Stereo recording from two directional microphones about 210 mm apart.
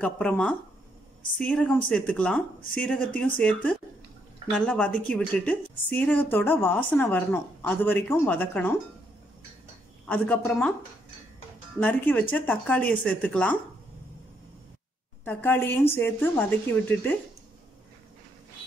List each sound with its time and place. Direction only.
0.0 s a woman's voice: 5° left (ahead or behind)
10.0 s a woman's voice: 5° left (ahead or behind)
11.8 s a woman's voice: 5° left (ahead or behind)
15.2 s a woman's voice: 10° left (ahead or behind)